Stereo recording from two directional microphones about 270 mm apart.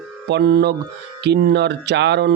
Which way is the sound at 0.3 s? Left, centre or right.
Right.